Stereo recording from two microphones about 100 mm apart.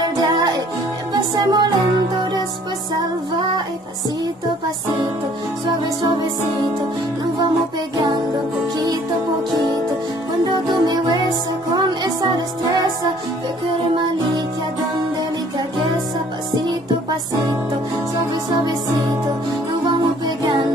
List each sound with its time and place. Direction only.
0.2 s music: 45° right (ahead or behind)
10.4 s music: 45° right (ahead or behind)
19.8 s music: 45° right (ahead or behind)